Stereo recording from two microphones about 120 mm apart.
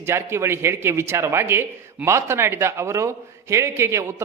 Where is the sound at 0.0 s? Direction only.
20° right (ahead or behind).